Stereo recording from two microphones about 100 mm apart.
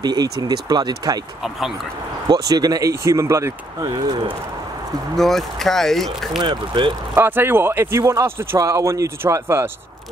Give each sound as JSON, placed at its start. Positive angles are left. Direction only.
{"t": 0.0, "sound": "speech", "side_deg": -45}
{"t": 2.2, "sound": "speech", "side_deg": -40}
{"t": 3.8, "sound": "speech", "side_deg": -45}
{"t": 5.1, "sound": "speech", "side_deg": 5}
{"t": 6.4, "sound": "speech", "side_deg": -50}
{"t": 7.2, "sound": "speech", "side_deg": -20}